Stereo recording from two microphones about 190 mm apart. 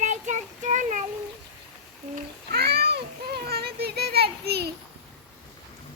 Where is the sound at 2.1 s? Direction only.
55° right (ahead or behind).